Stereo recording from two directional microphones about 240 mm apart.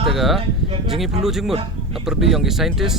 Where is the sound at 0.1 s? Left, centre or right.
Centre.